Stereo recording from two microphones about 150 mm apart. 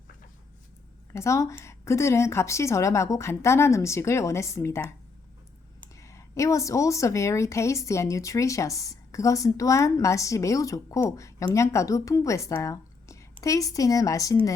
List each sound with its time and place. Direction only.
1.1 s a woman's voice: 20° left (ahead or behind)
6.0 s a woman's voice: 20° left (ahead or behind)